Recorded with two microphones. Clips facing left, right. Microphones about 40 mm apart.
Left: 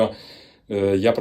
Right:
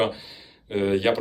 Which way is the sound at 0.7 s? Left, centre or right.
Centre.